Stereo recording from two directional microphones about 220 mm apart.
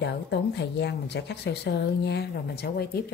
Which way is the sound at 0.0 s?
50° left (ahead or behind).